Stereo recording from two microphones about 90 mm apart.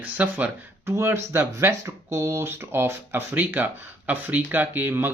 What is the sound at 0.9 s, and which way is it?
Speech, 30° right (ahead or behind).